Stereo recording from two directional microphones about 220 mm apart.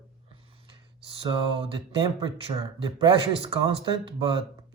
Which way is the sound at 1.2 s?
25° right (ahead or behind).